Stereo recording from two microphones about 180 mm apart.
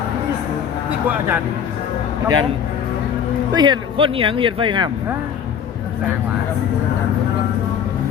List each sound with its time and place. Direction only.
0.9 s speech: 10° right (ahead or behind)
3.5 s speech: 25° right (ahead or behind)